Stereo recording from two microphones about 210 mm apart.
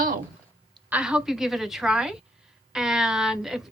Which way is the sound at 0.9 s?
5° right (ahead or behind).